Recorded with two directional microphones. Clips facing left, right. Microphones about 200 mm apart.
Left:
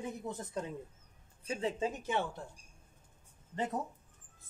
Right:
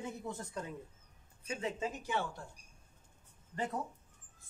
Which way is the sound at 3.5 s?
20° left (ahead or behind).